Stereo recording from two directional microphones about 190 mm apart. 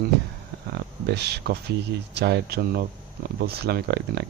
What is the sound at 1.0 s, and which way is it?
Speech, 60° right (ahead or behind).